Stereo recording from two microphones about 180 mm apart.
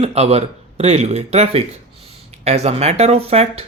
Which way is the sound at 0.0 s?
35° right (ahead or behind).